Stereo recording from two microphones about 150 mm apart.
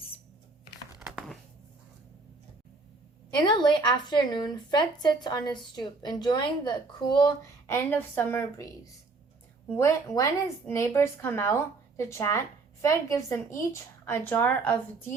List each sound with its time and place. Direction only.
0.9 s crumpling: 5° right (ahead or behind)
3.3 s speech: 30° left (ahead or behind)
7.7 s speech: 15° left (ahead or behind)